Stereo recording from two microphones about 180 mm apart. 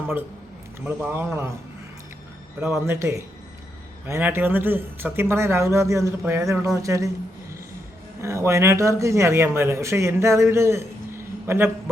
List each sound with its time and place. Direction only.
0.9 s a man's voice: 10° right (ahead or behind)
2.6 s a man's voice: 15° right (ahead or behind)
8.2 s a man's voice: 15° right (ahead or behind)